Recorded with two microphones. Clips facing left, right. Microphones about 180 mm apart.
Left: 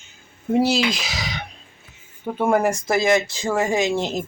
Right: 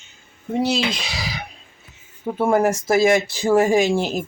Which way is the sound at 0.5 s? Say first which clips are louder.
Left 2 dB; 5° left (ahead or behind).